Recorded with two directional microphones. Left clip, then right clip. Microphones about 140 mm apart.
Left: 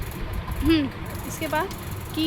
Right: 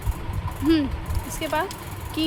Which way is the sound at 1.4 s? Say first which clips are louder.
Right 1 dB; 20° right (ahead or behind).